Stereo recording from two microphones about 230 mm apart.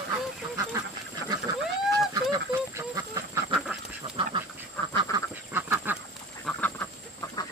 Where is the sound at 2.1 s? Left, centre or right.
Centre.